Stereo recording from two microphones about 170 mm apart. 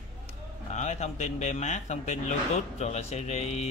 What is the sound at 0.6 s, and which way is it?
A man's voice, 45° left (ahead or behind).